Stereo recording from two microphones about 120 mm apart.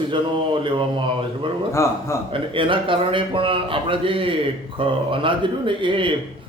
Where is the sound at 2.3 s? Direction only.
45° right (ahead or behind).